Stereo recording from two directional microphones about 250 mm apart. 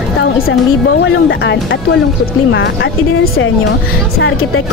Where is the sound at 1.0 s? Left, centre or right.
Left.